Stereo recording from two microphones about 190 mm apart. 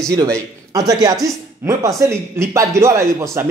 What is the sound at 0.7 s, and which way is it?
A man's voice, 20° right (ahead or behind).